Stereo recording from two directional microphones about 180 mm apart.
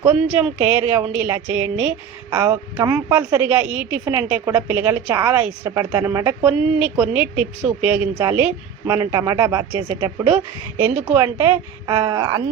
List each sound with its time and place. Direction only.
0.0 s a woman's voice: 10° right (ahead or behind)